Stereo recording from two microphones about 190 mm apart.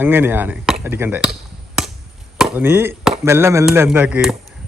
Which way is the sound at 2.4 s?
10° right (ahead or behind).